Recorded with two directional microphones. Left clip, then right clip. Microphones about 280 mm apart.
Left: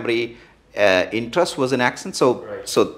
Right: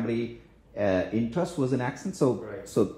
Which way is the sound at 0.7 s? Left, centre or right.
Centre.